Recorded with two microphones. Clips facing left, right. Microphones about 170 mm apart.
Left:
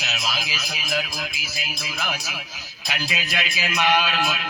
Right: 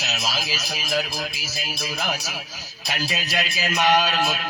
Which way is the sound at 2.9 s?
40° right (ahead or behind).